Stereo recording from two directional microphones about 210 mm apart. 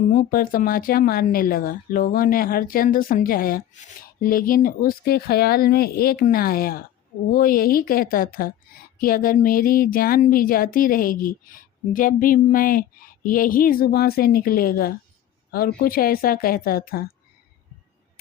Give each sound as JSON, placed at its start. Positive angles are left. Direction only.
{"t": 0.1, "sound": "speech", "side_deg": 45}